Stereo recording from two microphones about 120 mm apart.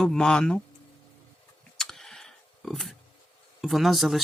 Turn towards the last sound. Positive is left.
turn(degrees=0)  # may be behind; listen again after turning